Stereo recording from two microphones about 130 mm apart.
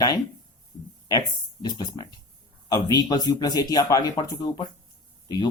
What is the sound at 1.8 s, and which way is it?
Speech, 30° left (ahead or behind).